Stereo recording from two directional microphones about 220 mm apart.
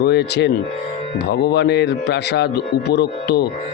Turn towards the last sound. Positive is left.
turn(degrees=50)  # may be behind; listen again after turning